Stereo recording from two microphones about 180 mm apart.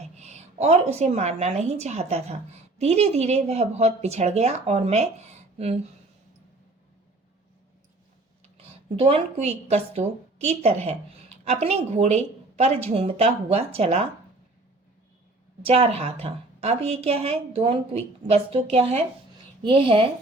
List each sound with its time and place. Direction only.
0.2 s a woman's voice: 40° right (ahead or behind)
8.5 s a woman's voice: 35° right (ahead or behind)
15.6 s a woman's voice: 35° right (ahead or behind)